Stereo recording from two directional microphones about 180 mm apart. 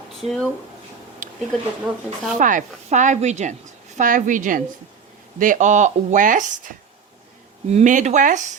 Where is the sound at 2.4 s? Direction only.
45° right (ahead or behind).